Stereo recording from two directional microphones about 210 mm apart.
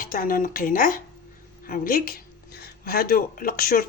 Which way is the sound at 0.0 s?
40° left (ahead or behind).